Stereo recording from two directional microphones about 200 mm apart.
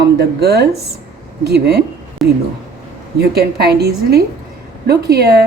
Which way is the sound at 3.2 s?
50° right (ahead or behind).